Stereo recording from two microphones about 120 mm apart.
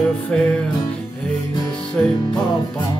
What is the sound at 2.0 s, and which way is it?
Music, 10° left (ahead or behind).